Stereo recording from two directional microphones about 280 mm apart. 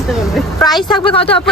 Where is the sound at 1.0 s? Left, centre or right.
Centre.